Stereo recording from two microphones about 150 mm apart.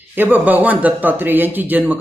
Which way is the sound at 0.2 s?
10° right (ahead or behind).